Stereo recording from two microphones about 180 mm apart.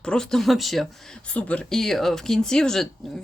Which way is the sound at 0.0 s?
5° left (ahead or behind).